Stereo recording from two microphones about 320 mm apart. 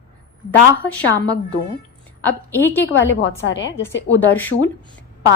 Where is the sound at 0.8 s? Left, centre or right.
Centre.